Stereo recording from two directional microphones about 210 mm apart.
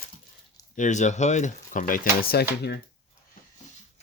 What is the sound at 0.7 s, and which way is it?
Speech, 35° left (ahead or behind).